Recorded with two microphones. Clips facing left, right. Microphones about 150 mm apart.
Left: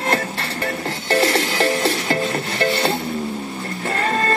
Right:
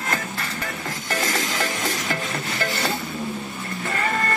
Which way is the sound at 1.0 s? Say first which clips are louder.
Left 8 dB; 30° left (ahead or behind).